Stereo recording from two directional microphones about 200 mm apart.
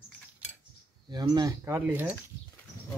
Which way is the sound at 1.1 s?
20° right (ahead or behind).